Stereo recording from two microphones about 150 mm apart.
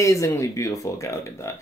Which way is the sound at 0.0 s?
20° left (ahead or behind).